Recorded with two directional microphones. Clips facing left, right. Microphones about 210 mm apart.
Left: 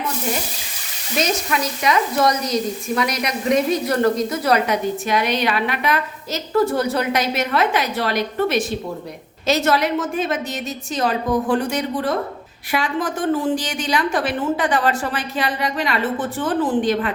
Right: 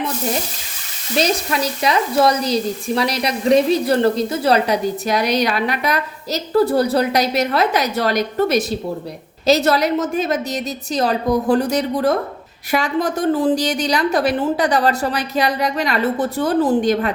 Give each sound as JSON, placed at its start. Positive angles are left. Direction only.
{"t": 1.2, "sound": "speech", "side_deg": -35}